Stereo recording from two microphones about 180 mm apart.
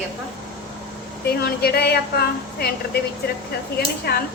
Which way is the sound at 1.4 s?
60° left (ahead or behind).